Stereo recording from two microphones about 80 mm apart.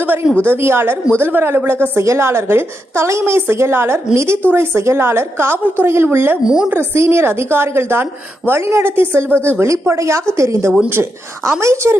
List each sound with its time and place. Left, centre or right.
0.4 s a woman's voice: right
6.4 s a woman's voice: centre
6.7 s a woman's voice: right